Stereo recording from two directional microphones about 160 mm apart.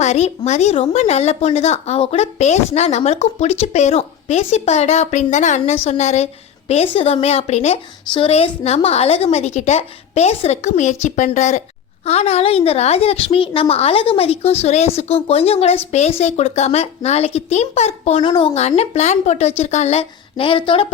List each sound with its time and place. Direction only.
0.0 s a woman's voice: 45° left (ahead or behind)
18.2 s speech: 30° left (ahead or behind)
18.8 s a woman's voice: 45° left (ahead or behind)